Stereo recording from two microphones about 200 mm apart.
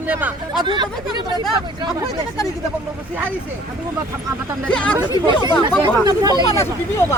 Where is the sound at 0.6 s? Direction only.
20° right (ahead or behind).